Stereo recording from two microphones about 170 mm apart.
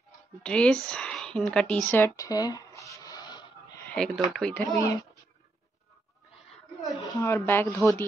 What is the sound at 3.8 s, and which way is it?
Speech, 5° left (ahead or behind).